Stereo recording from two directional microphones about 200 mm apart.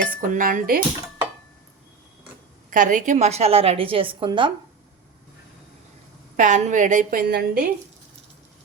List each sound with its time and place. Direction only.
0.1 s a woman's voice: 40° right (ahead or behind)
2.6 s a woman's voice: 40° right (ahead or behind); by 4.5 s 25° right (ahead or behind)
6.3 s a woman's voice: 40° right (ahead or behind)